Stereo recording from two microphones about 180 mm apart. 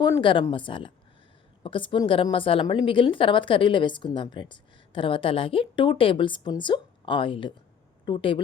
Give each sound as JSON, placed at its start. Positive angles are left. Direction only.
{"t": 0.0, "sound": "a woman's voice", "side_deg": 25}